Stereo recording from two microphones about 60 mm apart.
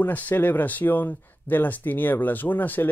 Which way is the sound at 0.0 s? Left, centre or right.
Left.